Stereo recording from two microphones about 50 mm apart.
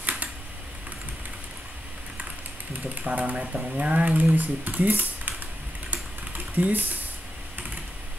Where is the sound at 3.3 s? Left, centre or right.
Centre.